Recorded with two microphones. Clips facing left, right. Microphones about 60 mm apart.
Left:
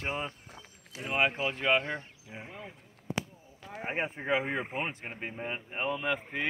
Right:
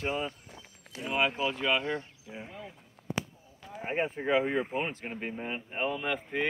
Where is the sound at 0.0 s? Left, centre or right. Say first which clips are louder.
Right 2 dB; left.